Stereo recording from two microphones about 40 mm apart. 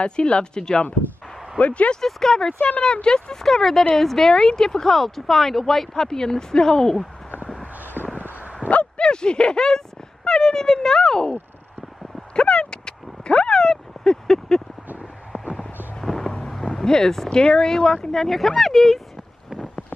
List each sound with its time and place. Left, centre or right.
0.0 s speech: left
1.6 s speech: left
2.0 s speech: centre
2.8 s speech: left
3.4 s speech: centre
8.6 s a sound: left
9.0 s speech: left
12.4 s a sound: left
16.0 s a sound: centre
16.4 s speech: centre
18.1 s speech: centre